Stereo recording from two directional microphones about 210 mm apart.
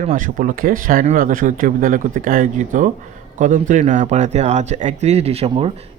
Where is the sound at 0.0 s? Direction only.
40° right (ahead or behind).